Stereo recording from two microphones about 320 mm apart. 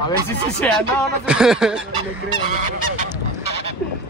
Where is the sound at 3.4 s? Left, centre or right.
Right.